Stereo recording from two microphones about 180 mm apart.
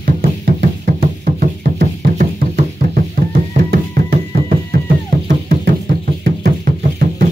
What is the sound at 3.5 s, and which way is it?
Music, 55° right (ahead or behind).